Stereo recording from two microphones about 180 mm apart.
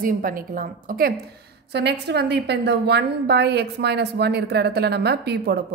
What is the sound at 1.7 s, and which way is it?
A woman's voice, 70° right (ahead or behind).